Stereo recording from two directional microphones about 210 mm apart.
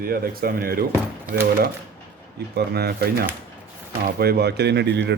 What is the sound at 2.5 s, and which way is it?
Speech, 50° right (ahead or behind).